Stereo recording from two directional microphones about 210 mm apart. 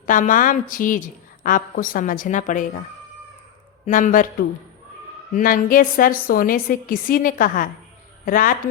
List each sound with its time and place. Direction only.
0.0 s a woman's voice: 40° left (ahead or behind)
3.8 s a woman's voice: 40° left (ahead or behind)
5.3 s a woman's voice: 40° left (ahead or behind)